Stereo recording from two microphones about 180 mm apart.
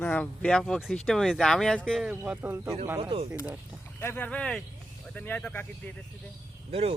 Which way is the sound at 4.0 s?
10° left (ahead or behind).